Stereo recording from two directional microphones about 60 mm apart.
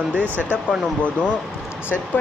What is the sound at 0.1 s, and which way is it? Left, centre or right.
Speech, right.